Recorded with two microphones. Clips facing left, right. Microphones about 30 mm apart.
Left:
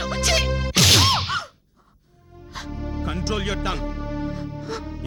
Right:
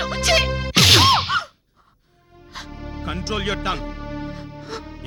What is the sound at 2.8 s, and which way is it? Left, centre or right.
Music, right.